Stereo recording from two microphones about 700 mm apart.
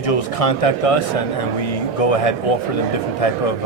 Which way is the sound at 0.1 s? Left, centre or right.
Left.